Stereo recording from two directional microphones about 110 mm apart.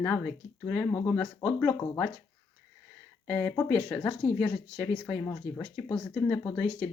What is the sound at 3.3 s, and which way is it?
Speech, 15° left (ahead or behind).